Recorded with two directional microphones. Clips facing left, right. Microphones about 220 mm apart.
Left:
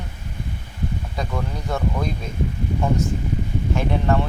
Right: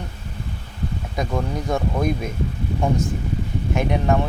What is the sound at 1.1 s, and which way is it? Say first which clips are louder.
Speech: right 7 dB; 15° right (ahead or behind).